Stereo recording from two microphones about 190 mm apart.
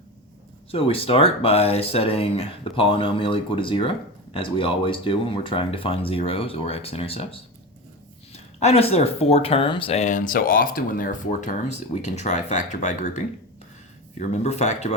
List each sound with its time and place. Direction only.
0.7 s speech: 30° left (ahead or behind)